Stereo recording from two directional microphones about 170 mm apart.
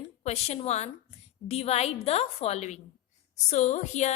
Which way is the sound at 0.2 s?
40° left (ahead or behind).